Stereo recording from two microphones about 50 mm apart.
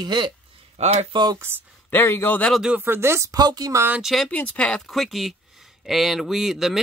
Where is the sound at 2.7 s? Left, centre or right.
Right.